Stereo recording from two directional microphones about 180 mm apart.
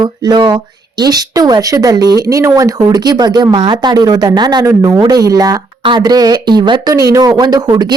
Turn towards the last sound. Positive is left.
turn(degrees=-25)  # may be behind; listen again after turning